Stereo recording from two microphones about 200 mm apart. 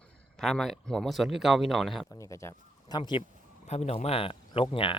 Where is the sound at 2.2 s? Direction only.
15° left (ahead or behind).